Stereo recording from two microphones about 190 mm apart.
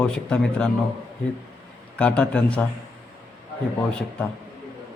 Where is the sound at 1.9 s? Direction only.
5° left (ahead or behind).